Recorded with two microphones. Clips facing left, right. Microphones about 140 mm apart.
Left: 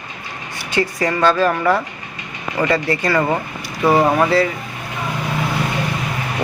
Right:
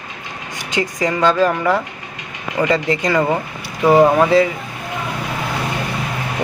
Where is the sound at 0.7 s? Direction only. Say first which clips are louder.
Even; 15° right (ahead or behind).